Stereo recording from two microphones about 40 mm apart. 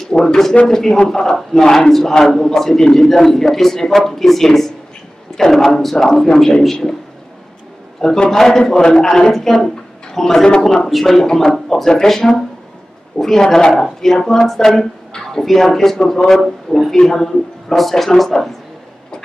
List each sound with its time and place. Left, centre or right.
0.2 s a man's voice: centre
8.0 s a man's voice: centre
11.2 s a man's voice: centre